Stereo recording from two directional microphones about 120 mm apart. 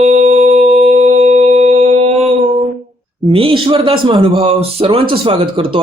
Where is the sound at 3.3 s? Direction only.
45° right (ahead or behind).